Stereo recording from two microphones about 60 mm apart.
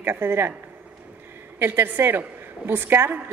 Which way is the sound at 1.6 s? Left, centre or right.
Right.